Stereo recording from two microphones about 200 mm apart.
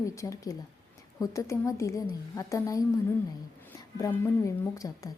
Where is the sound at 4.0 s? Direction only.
15° left (ahead or behind).